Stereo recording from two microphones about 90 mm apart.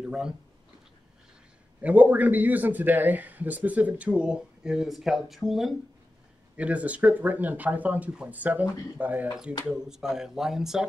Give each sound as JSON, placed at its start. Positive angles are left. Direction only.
{"t": 1.8, "sound": "a man's voice", "side_deg": -15}
{"t": 6.5, "sound": "a man's voice", "side_deg": -15}
{"t": 9.7, "sound": "speech", "side_deg": -5}